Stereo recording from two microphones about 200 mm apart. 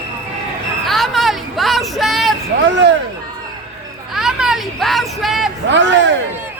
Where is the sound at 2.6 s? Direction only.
65° right (ahead or behind).